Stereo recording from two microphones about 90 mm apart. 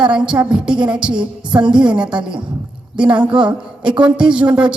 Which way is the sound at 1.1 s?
60° right (ahead or behind).